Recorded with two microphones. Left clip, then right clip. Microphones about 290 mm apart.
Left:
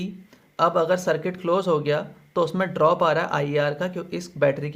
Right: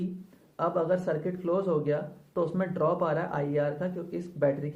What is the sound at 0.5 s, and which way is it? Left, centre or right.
Speech, left.